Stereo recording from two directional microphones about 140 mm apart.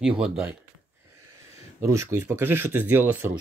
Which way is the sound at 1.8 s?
20° right (ahead or behind).